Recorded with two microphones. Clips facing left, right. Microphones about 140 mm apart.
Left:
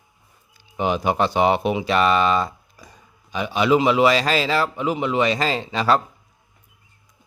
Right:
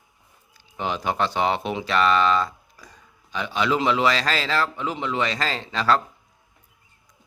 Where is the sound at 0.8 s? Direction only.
15° left (ahead or behind).